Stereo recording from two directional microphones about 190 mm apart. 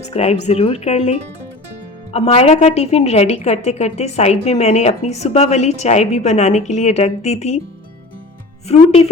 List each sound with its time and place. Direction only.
0.0 s speech: 35° left (ahead or behind)
2.1 s speech: 35° left (ahead or behind)
8.6 s speech: 30° left (ahead or behind)